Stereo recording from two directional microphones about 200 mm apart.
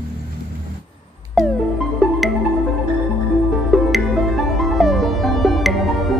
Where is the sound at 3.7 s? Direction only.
Centre (ahead or behind).